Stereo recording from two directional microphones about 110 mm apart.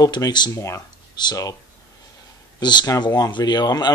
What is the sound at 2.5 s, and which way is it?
Speech, 40° left (ahead or behind).